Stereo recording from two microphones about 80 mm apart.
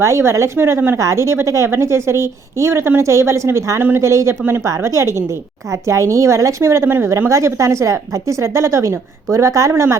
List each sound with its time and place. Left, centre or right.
0.0 s a woman's voice: right